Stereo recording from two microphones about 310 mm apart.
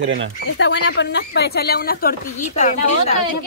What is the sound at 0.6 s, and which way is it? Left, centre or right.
Speech, left.